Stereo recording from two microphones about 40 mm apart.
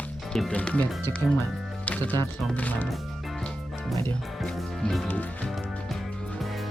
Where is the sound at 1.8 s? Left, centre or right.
Left.